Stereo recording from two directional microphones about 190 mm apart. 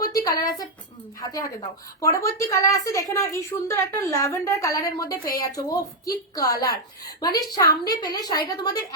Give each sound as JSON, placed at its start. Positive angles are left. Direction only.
{"t": 0.3, "sound": "a woman's voice", "side_deg": 20}